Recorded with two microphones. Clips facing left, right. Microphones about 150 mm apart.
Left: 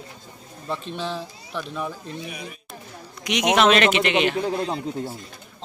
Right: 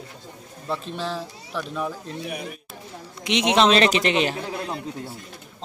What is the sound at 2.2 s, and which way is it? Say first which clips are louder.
Speech: right 4 dB; 55° right (ahead or behind).